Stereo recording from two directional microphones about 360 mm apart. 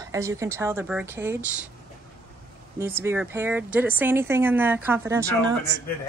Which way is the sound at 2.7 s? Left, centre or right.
Centre.